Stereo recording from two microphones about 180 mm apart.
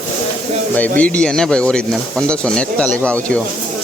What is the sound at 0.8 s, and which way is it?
Speech, 10° left (ahead or behind).